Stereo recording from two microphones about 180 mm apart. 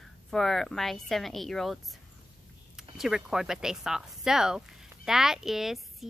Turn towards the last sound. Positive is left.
turn(degrees=0)  # may be behind; listen again after turning